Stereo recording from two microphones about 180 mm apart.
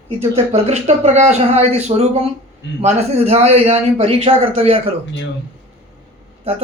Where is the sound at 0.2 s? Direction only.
35° right (ahead or behind).